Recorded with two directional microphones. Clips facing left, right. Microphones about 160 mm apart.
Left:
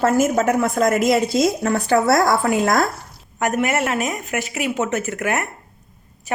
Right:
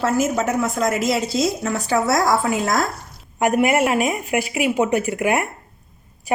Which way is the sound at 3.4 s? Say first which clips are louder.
Right 3 dB; 15° right (ahead or behind).